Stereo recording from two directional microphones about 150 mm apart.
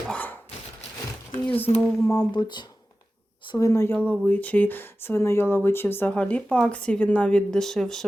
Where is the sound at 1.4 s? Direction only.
10° left (ahead or behind).